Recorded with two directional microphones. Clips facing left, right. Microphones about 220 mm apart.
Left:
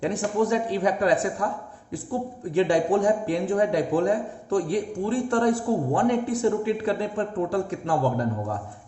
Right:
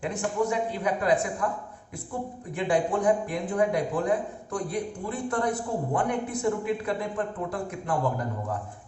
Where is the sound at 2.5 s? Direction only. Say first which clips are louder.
Left 5 dB; 30° left (ahead or behind).